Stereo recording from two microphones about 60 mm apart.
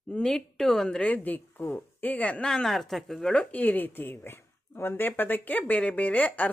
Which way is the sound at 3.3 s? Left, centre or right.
Left.